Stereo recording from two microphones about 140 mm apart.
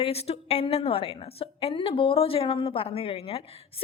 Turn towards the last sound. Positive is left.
turn(degrees=45)  # may be behind; listen again after turning